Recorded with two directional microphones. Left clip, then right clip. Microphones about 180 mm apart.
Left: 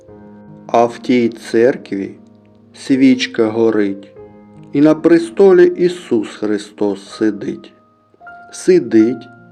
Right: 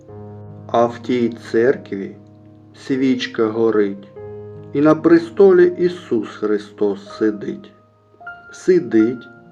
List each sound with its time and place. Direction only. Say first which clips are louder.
0.7 s speech: left 4 dB; 35° left (ahead or behind)